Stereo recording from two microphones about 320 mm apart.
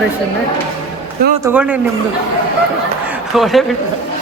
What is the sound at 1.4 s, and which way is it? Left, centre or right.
Speech, centre.